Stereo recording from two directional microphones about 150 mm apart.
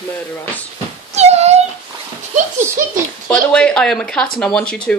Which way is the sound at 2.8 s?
70° right (ahead or behind).